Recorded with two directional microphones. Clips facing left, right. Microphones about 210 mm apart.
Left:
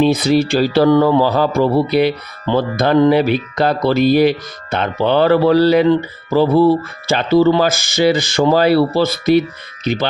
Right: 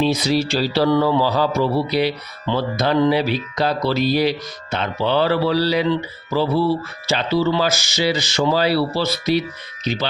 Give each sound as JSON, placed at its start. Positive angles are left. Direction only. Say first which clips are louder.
{"t": 0.0, "sound": "speech", "louder": "left 5 dB", "side_deg": 55}